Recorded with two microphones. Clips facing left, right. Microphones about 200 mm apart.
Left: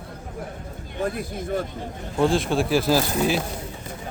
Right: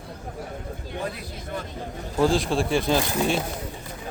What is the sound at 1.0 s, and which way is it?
Speech, 50° left (ahead or behind).